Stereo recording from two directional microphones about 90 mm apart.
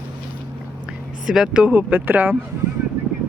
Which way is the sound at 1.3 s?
10° right (ahead or behind).